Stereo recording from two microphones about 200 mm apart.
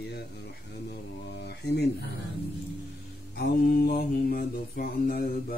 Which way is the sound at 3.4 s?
50° left (ahead or behind).